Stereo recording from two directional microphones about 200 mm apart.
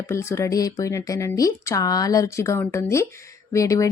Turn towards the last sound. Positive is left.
turn(degrees=15)  # may be behind; listen again after turning